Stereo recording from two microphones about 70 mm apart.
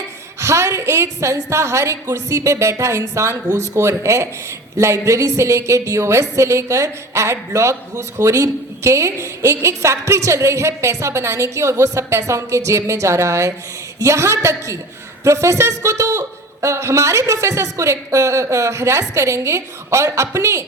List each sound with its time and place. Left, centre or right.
0.3 s a woman's voice: right